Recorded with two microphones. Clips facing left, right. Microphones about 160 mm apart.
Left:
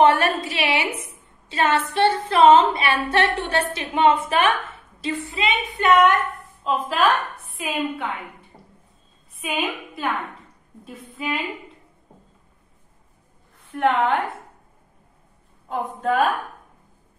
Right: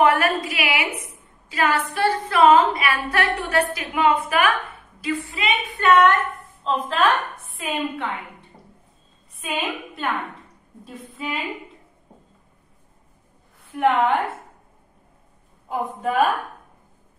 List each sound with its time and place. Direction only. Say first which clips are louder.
0.0 s a woman's voice: left 1 dB; 30° left (ahead or behind); by 8.2 s centre (ahead or behind)
9.4 s a woman's voice: left 1 dB; centre (ahead or behind)
13.7 s a woman's voice: right 1 dB; centre (ahead or behind)
15.7 s a woman's voice: left 1 dB; 5° right (ahead or behind)